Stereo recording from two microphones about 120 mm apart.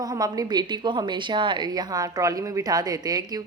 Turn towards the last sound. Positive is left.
turn(degrees=-35)  # may be behind; listen again after turning